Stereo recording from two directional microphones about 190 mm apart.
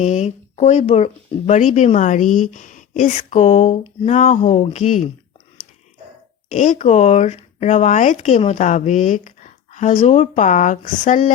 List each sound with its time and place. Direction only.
0.0 s speech: 35° left (ahead or behind)
6.5 s speech: 40° left (ahead or behind)